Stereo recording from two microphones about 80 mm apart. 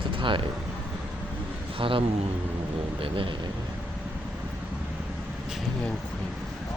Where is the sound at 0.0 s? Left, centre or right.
Right.